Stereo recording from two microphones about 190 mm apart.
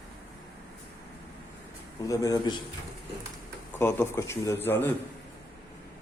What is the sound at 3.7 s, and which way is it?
A man's voice, 10° left (ahead or behind).